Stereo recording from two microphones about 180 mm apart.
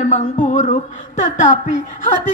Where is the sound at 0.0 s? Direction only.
45° left (ahead or behind).